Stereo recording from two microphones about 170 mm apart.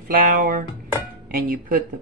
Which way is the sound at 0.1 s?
55° right (ahead or behind).